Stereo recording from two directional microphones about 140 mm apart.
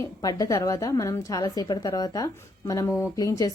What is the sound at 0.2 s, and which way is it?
A woman's voice, 25° left (ahead or behind).